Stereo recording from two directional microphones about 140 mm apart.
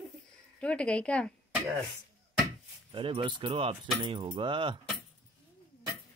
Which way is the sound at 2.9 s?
40° right (ahead or behind).